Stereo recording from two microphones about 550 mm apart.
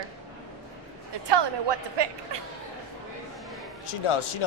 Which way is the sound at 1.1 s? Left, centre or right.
Right.